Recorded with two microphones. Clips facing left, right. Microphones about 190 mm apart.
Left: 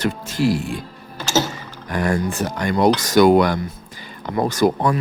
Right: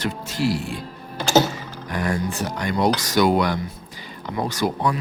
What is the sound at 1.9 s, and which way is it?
Speech, 50° left (ahead or behind).